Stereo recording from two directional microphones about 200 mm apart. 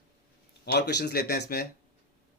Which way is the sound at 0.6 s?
55° left (ahead or behind).